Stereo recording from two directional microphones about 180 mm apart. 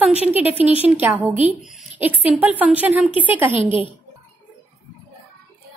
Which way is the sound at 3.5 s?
30° left (ahead or behind).